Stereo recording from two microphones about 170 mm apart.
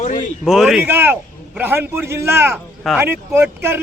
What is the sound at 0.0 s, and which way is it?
Speech, 50° left (ahead or behind).